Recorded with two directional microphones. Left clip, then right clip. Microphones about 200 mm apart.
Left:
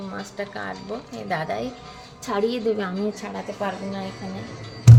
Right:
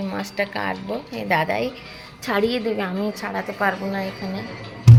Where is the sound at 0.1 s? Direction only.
25° right (ahead or behind).